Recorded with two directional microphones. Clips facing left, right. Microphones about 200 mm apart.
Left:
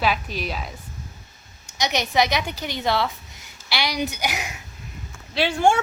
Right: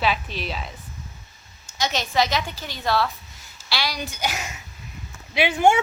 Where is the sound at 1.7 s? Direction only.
15° left (ahead or behind).